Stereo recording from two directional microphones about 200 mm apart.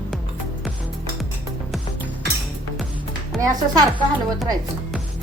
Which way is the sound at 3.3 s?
Centre (ahead or behind).